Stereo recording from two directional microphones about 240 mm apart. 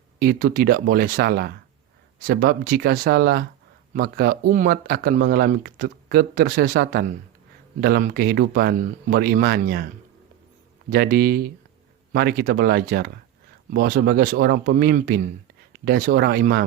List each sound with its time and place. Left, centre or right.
0.2 s speech: right
10.8 s speech: right